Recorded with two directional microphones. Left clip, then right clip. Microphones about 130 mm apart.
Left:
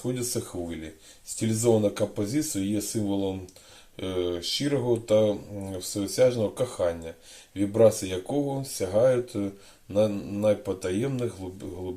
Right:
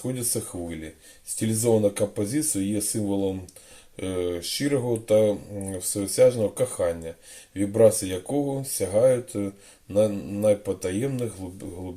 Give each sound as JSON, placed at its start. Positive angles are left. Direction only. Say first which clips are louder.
{"t": 0.3, "sound": "speech", "louder": "right 1 dB", "side_deg": -40}